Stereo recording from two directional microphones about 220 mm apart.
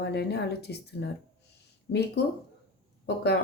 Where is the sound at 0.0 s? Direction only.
50° left (ahead or behind).